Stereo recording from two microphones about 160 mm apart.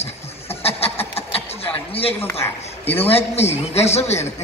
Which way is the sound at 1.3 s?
40° left (ahead or behind).